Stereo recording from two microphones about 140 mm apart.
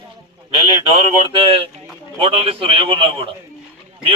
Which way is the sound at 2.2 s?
40° right (ahead or behind).